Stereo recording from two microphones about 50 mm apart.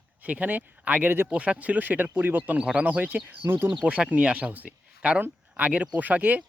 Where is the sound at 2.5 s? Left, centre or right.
Centre.